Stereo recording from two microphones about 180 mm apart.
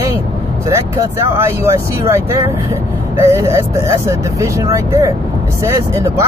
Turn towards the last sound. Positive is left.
turn(degrees=-15)  # may be behind; listen again after turning